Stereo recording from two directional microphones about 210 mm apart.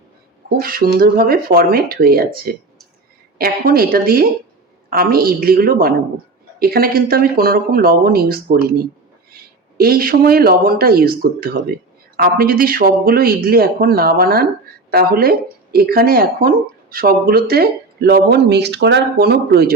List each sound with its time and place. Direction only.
0.6 s speech: 45° right (ahead or behind)